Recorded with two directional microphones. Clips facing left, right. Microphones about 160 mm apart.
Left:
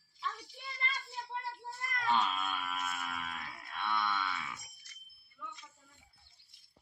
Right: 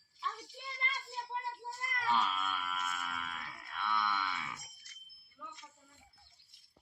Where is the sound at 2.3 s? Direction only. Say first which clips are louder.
Left 1 dB; 10° left (ahead or behind).